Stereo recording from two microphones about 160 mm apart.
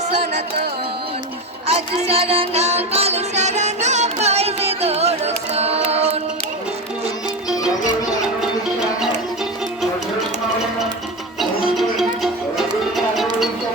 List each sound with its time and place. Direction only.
1.6 s music: 40° right (ahead or behind)
9.0 s music: centre (ahead or behind)
11.8 s music: centre (ahead or behind)